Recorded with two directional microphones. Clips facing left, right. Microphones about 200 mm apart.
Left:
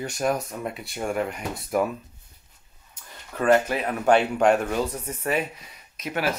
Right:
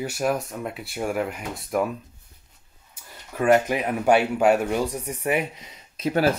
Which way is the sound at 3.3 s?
15° right (ahead or behind).